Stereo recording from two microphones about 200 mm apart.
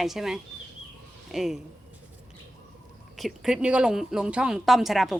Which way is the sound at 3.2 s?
5° right (ahead or behind).